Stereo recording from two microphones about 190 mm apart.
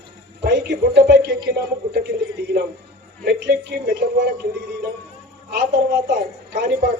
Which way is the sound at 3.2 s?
60° right (ahead or behind).